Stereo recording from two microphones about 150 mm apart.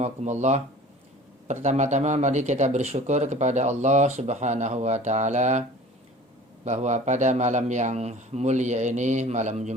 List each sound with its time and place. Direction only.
0.0 s speech: 50° right (ahead or behind)
6.7 s speech: 50° right (ahead or behind)